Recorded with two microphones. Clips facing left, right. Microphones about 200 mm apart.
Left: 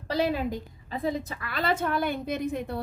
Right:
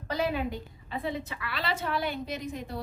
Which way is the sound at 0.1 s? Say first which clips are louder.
Left 3 dB; 35° left (ahead or behind).